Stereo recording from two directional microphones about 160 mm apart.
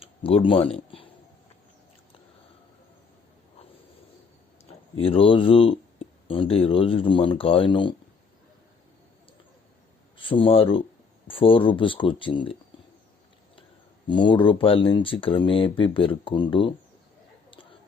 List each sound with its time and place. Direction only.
0.0 s speech: 35° left (ahead or behind)
4.9 s speech: 35° left (ahead or behind)
10.2 s speech: 35° left (ahead or behind)
14.1 s speech: 30° left (ahead or behind)